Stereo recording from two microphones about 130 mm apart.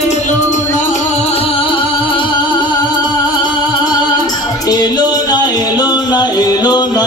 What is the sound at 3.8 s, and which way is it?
Music, 30° left (ahead or behind).